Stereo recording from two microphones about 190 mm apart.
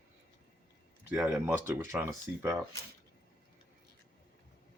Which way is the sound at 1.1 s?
Centre (ahead or behind).